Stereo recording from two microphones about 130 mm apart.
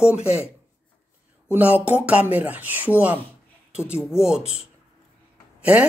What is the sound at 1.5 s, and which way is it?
A woman's voice, 10° right (ahead or behind).